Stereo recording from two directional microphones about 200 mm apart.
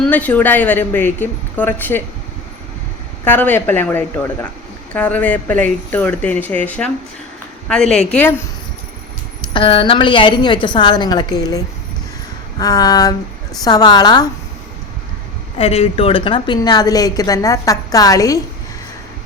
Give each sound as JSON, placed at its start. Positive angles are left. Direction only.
{"t": 0.0, "sound": "a woman's voice", "side_deg": 5}
{"t": 3.2, "sound": "a woman's voice", "side_deg": 10}
{"t": 9.5, "sound": "a woman's voice", "side_deg": 25}
{"t": 15.5, "sound": "a woman's voice", "side_deg": 30}